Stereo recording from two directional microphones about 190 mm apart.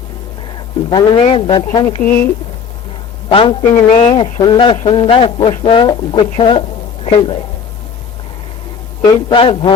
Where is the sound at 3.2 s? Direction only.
25° left (ahead or behind).